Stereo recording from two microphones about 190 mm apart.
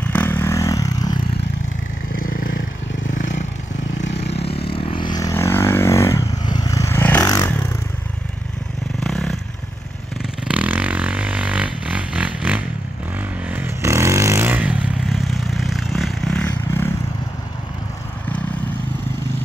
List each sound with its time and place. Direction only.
0.0 s vehicle: 10° left (ahead or behind)
2.2 s vehicle: 45° left (ahead or behind); by 7.5 s 15° left (ahead or behind)
9.0 s vehicle: centre (ahead or behind)
10.5 s music: 10° right (ahead or behind)
13.5 s vehicle: 10° right (ahead or behind); by 16.9 s 10° left (ahead or behind)